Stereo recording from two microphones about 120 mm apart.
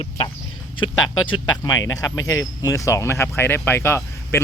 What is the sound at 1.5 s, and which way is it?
Speech, 30° left (ahead or behind).